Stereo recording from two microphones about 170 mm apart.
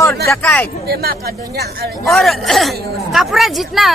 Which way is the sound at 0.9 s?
65° right (ahead or behind).